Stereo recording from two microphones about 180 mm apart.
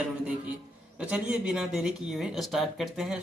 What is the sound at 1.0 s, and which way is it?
Speech, 5° right (ahead or behind).